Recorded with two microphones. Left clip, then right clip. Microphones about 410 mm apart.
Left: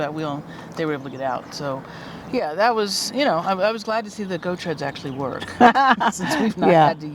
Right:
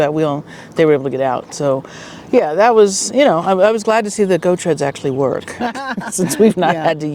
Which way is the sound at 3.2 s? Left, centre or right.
Right.